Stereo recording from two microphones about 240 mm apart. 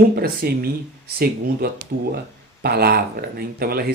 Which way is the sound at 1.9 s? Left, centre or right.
Right.